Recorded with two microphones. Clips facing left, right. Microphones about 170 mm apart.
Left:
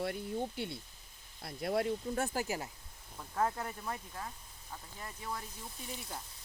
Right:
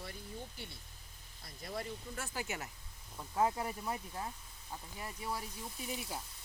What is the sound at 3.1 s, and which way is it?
Speech, 10° right (ahead or behind).